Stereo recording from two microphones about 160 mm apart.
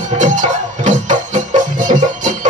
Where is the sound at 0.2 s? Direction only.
50° right (ahead or behind).